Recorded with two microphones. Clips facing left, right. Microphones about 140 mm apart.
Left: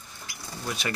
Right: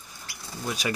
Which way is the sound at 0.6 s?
10° right (ahead or behind).